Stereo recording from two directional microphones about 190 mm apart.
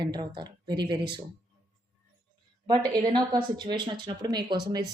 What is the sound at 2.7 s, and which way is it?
Speech, 25° right (ahead or behind).